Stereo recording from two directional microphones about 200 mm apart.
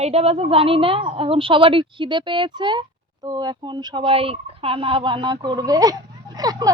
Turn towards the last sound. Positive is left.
turn(degrees=-20)  # may be behind; listen again after turning